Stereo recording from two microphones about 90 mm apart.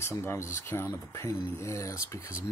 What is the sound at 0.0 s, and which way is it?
Speech, 30° left (ahead or behind).